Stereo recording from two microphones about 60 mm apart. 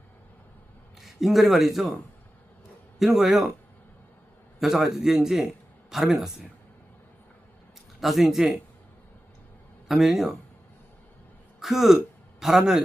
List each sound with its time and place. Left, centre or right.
1.0 s speech: centre
3.0 s a man's voice: centre
4.6 s a man's voice: centre
8.0 s speech: centre
9.9 s speech: centre
11.6 s a man's voice: centre